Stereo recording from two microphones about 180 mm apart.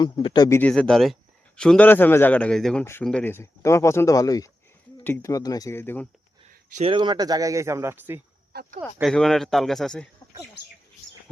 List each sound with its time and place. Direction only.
0.0 s speech: 25° left (ahead or behind)
0.6 s speech: 5° left (ahead or behind)
6.8 s speech: 25° right (ahead or behind)
9.0 s speech: centre (ahead or behind)